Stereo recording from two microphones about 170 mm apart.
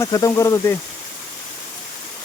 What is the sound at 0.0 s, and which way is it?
Speech, 20° left (ahead or behind).